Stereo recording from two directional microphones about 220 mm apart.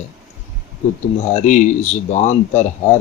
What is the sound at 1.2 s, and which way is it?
Speech, 30° left (ahead or behind).